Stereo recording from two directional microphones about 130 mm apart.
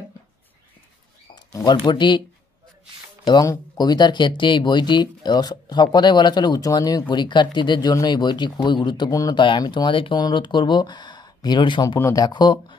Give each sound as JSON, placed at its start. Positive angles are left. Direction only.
{"t": 1.3, "sound": "speech", "side_deg": 30}
{"t": 3.3, "sound": "speech", "side_deg": 30}
{"t": 12.0, "sound": "speech", "side_deg": 25}
{"t": 12.3, "sound": "speech", "side_deg": 35}